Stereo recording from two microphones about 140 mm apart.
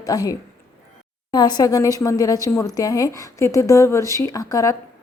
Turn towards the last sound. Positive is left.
turn(degrees=25)  # may be behind; listen again after turning